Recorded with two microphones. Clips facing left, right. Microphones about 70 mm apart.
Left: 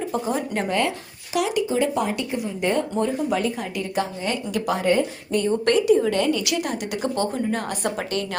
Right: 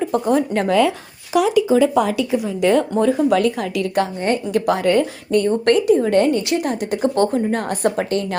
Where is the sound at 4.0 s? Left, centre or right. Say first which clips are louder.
Right 6 dB; right.